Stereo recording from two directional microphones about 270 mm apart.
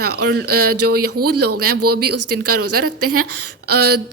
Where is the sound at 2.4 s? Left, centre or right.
Right.